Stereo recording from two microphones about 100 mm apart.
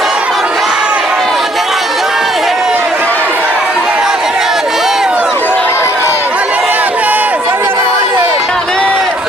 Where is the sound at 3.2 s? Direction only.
20° right (ahead or behind).